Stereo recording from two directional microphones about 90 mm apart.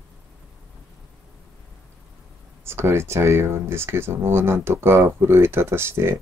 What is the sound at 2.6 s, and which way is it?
Speech, 30° right (ahead or behind).